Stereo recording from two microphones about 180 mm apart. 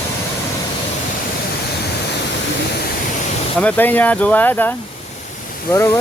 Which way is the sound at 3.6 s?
10° left (ahead or behind).